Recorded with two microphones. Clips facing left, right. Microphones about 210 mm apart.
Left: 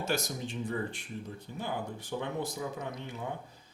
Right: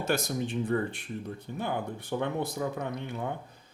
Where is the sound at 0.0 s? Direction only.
55° right (ahead or behind).